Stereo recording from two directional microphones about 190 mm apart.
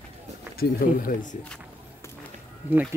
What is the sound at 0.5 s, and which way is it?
Speech, 45° left (ahead or behind).